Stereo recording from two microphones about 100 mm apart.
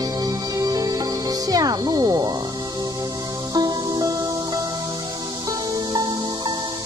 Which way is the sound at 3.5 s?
40° right (ahead or behind).